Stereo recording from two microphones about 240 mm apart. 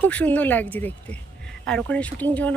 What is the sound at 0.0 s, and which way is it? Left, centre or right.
Speech, centre.